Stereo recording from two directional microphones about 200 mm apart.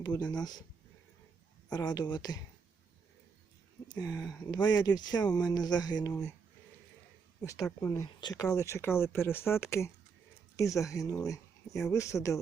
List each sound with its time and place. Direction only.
0.0 s speech: 20° left (ahead or behind)
1.7 s speech: 20° left (ahead or behind)
3.9 s speech: 15° left (ahead or behind)
7.8 s speech: 15° left (ahead or behind)